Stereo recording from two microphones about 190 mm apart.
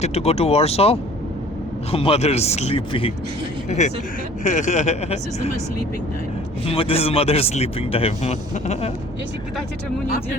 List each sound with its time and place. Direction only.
0.0 s speech: 35° left (ahead or behind)
6.7 s speech: 30° left (ahead or behind)